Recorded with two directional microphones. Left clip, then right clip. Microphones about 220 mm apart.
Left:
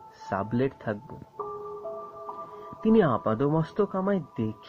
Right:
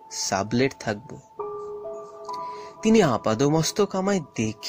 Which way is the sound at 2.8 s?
25° right (ahead or behind).